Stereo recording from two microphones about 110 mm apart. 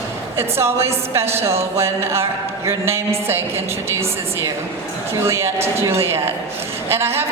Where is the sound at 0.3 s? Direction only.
25° right (ahead or behind).